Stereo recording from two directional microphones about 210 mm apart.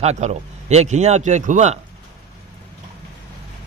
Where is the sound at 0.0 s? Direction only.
30° right (ahead or behind).